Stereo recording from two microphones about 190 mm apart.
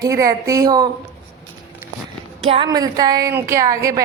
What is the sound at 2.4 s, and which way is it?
A woman's voice, 30° right (ahead or behind).